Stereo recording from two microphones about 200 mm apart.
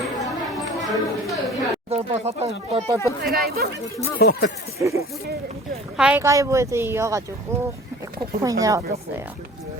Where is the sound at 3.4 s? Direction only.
50° right (ahead or behind).